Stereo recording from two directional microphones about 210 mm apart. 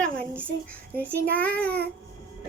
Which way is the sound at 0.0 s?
5° left (ahead or behind).